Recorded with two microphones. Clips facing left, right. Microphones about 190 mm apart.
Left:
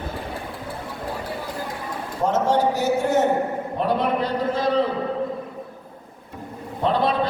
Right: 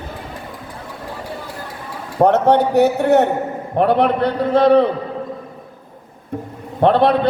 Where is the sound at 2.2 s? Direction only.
65° right (ahead or behind).